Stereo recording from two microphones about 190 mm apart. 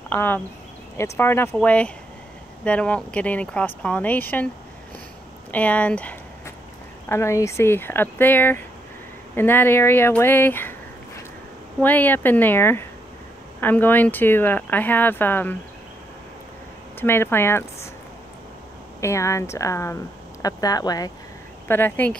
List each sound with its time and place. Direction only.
0.1 s speech: 10° left (ahead or behind)
5.5 s speech: 5° left (ahead or behind)
11.8 s speech: 10° left (ahead or behind)
17.0 s speech: 10° left (ahead or behind)
18.9 s speech: 15° left (ahead or behind)